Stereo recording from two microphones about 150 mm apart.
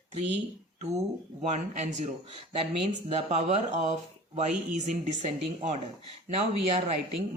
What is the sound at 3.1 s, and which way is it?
Speech, 45° right (ahead or behind).